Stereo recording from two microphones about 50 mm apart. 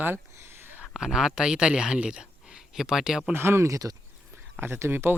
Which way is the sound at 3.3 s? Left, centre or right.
Right.